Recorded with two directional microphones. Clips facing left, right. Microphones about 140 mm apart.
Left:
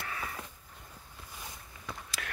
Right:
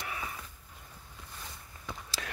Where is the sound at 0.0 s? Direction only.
15° right (ahead or behind).